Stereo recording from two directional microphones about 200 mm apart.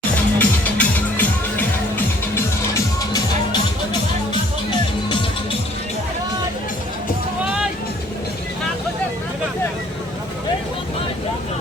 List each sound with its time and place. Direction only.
0.3 s music: 10° left (ahead or behind)